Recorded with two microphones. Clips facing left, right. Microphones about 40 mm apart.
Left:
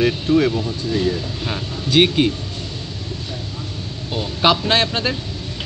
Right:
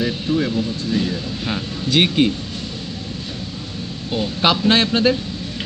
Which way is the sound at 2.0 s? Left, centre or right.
Centre.